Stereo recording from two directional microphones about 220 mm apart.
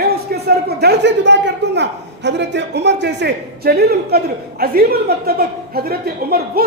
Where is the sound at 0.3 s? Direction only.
45° right (ahead or behind).